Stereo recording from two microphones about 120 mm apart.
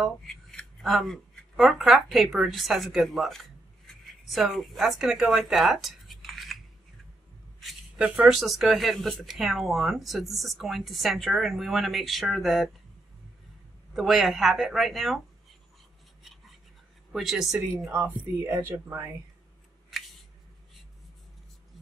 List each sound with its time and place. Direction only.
0.0 s speech: 5° left (ahead or behind)
8.0 s speech: 10° right (ahead or behind)
13.9 s speech: centre (ahead or behind)
17.1 s speech: centre (ahead or behind)
17.9 s speech: 20° right (ahead or behind)